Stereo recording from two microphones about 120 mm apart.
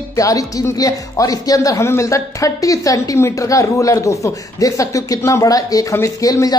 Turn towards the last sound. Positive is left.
turn(degrees=30)  # may be behind; listen again after turning